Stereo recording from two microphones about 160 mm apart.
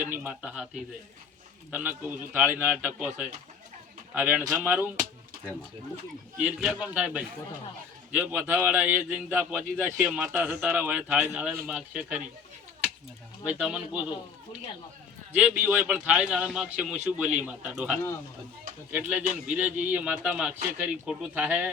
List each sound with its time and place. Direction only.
0.0 s a man's voice: 10° right (ahead or behind)
6.4 s a man's voice: 5° right (ahead or behind)
13.4 s speech: 5° right (ahead or behind)
15.3 s a man's voice: 10° right (ahead or behind)